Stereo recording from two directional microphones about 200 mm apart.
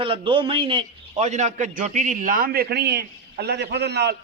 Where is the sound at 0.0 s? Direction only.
25° right (ahead or behind).